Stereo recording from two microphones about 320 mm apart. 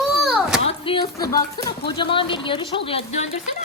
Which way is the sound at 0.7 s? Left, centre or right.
Centre.